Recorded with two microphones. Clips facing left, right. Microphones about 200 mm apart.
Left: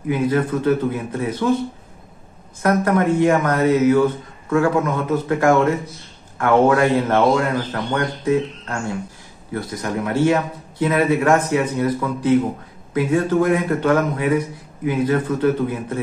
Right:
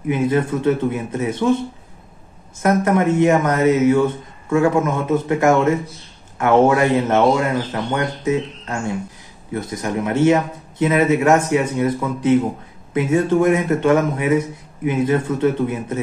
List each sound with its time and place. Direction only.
0.1 s a man's voice: 25° right (ahead or behind)
2.6 s a man's voice: 20° right (ahead or behind)